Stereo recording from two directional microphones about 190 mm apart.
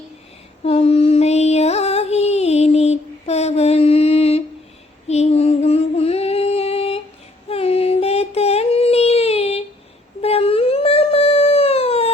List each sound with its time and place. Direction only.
0.6 s female singing: 30° left (ahead or behind)
5.0 s a sound: 35° left (ahead or behind)
7.4 s child singing: 30° left (ahead or behind)
10.2 s dog: 30° left (ahead or behind)